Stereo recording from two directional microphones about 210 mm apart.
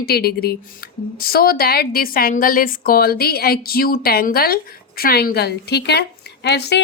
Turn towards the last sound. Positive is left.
turn(degrees=50)  # may be behind; listen again after turning